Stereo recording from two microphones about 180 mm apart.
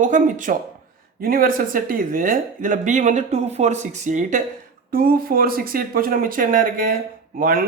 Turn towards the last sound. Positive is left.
turn(degrees=-50)  # may be behind; listen again after turning